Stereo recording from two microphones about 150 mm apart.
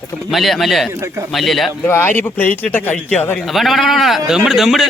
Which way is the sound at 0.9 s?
20° right (ahead or behind).